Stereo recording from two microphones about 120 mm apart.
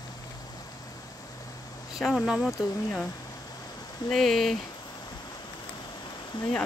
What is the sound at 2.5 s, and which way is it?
Speech, 25° left (ahead or behind).